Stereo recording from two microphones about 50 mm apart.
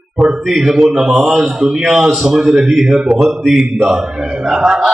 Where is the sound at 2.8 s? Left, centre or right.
Centre.